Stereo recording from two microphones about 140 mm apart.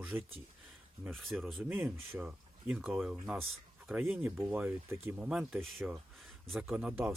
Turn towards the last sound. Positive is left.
turn(degrees=-10)  # may be behind; listen again after turning